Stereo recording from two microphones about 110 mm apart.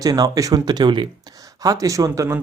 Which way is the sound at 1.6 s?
30° right (ahead or behind).